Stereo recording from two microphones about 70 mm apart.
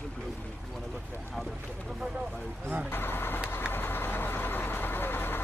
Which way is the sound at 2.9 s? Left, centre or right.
Left.